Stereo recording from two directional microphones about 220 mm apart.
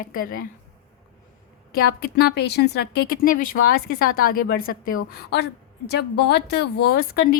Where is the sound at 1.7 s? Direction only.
45° left (ahead or behind).